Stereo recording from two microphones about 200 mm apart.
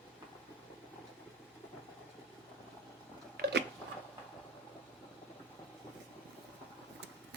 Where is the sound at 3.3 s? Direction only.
55° right (ahead or behind).